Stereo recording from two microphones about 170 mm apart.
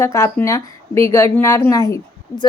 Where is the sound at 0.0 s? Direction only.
15° left (ahead or behind).